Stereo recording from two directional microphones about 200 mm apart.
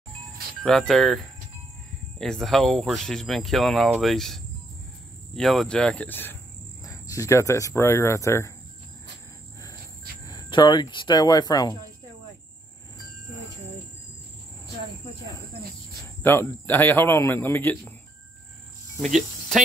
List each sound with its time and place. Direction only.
0.6 s speech: centre (ahead or behind)
10.2 s speech: 20° left (ahead or behind)
16.2 s a man's voice: 10° left (ahead or behind)
18.9 s cricket: centre (ahead or behind)